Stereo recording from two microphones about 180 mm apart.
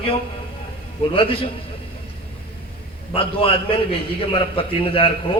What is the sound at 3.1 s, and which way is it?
A man's voice, 30° left (ahead or behind).